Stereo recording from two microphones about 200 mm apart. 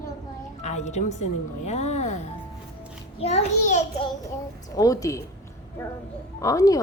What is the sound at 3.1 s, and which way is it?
Speech, 30° left (ahead or behind).